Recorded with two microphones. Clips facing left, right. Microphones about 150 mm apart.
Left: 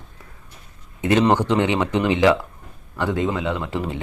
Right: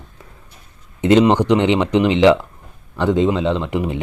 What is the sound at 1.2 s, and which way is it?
Speech, 15° right (ahead or behind).